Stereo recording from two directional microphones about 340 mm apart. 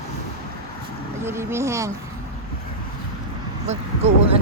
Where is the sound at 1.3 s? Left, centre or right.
Centre.